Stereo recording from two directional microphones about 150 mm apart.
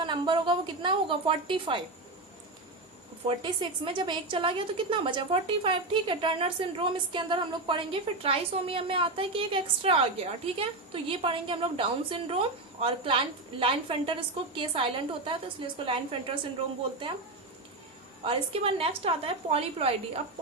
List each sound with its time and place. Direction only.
0.0 s a woman's voice: 30° right (ahead or behind)
3.2 s a woman's voice: 35° right (ahead or behind)
18.3 s a woman's voice: 40° right (ahead or behind)